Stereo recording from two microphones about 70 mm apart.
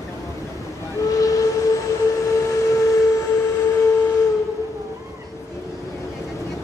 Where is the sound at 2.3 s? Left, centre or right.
Left.